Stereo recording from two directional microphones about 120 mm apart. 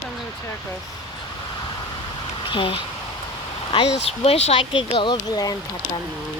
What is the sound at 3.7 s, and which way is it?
Speech, 55° left (ahead or behind).